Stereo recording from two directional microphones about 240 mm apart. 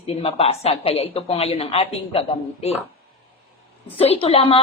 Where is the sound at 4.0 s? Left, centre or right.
Left.